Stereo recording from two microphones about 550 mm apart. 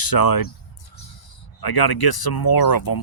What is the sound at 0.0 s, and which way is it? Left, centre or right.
Speech, left.